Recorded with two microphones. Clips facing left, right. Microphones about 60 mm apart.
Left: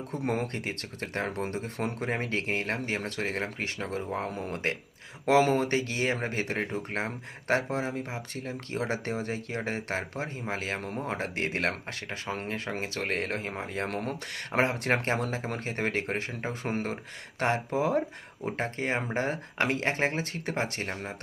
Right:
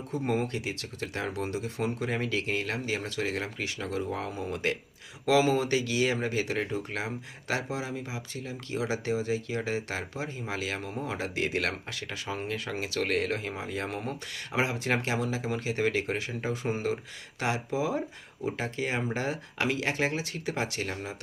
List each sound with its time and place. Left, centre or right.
0.1 s speech: left
0.4 s speech: left
4.3 s speech: left
4.5 s speech: left
13.8 s speech: left